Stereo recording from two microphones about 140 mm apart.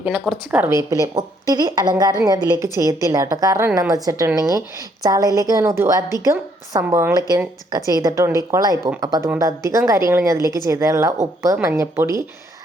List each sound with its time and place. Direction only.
0.0 s a woman's voice: 10° right (ahead or behind)
7.2 s a woman's voice: 30° right (ahead or behind)